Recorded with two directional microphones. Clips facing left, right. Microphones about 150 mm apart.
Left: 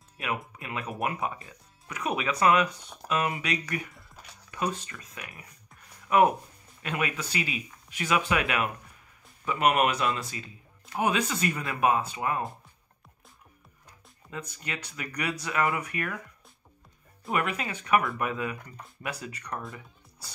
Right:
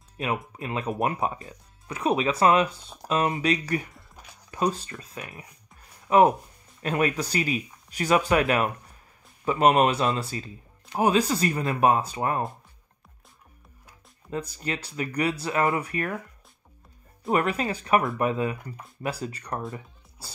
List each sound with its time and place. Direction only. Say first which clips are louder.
0.2 s speech: right 4 dB; 25° right (ahead or behind)
14.3 s speech: right 7 dB; 35° right (ahead or behind)
17.3 s speech: right 5 dB; 35° right (ahead or behind)